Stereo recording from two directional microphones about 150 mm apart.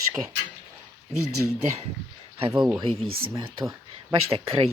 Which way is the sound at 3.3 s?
20° right (ahead or behind).